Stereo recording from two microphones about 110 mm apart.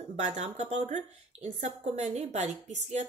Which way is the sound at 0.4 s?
90° right.